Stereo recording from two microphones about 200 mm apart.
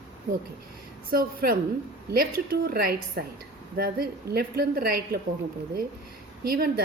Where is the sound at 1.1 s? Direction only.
45° right (ahead or behind).